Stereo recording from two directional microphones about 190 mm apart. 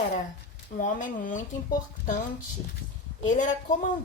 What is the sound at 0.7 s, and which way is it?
Speech, 45° left (ahead or behind).